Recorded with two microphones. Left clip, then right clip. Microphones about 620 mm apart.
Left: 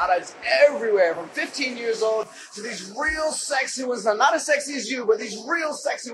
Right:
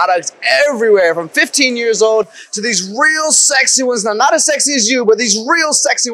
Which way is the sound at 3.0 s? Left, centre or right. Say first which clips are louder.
Right 12 dB; right.